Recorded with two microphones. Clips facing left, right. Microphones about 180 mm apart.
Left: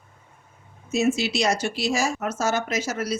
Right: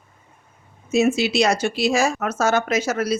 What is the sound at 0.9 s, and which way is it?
Speech, 65° right (ahead or behind).